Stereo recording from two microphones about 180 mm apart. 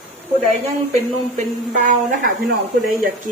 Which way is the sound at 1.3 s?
45° right (ahead or behind).